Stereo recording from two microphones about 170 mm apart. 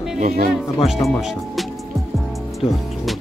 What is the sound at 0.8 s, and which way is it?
Speech, centre (ahead or behind).